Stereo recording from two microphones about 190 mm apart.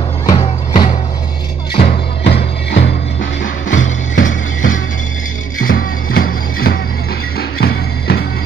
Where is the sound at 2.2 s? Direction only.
60° left (ahead or behind).